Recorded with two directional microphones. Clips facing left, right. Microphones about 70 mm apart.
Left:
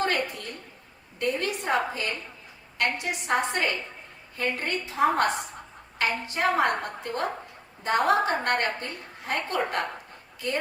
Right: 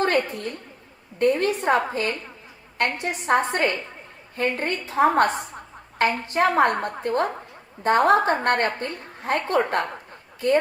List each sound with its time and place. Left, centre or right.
0.0 s a woman's voice: right